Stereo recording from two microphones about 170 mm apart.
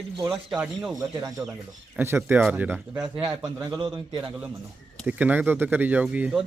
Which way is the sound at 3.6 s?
25° right (ahead or behind).